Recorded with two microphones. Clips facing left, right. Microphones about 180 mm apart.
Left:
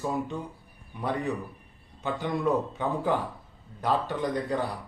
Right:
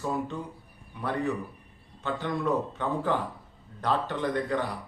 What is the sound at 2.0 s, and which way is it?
Speech, 15° left (ahead or behind).